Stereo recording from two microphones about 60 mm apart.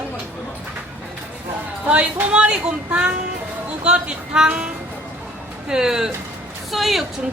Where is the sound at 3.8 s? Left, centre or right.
Centre.